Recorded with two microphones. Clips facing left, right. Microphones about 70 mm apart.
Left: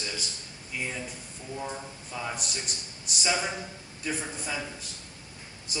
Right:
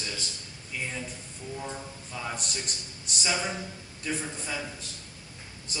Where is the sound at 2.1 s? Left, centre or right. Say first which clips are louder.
Left 1 dB; centre.